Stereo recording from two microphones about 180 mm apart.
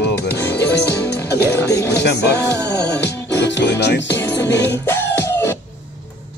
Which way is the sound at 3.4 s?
75° left (ahead or behind).